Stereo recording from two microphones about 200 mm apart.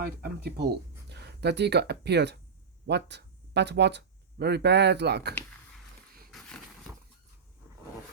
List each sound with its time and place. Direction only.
0.0 s speech: 55° right (ahead or behind)